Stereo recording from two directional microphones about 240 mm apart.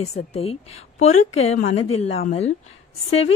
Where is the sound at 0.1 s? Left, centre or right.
Left.